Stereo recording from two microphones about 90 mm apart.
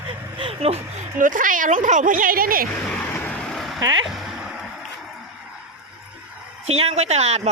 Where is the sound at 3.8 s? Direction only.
50° right (ahead or behind).